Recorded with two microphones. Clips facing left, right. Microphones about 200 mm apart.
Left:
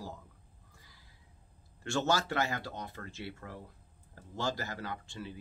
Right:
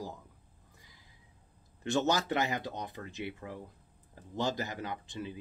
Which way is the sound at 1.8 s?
20° right (ahead or behind).